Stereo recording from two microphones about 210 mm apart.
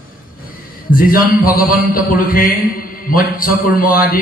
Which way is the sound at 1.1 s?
45° left (ahead or behind).